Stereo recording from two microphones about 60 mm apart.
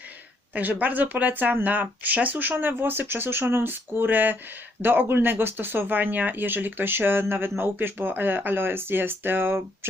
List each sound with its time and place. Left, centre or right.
0.5 s speech: right